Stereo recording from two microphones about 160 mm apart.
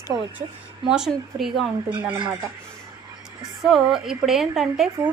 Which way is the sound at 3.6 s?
Centre (ahead or behind).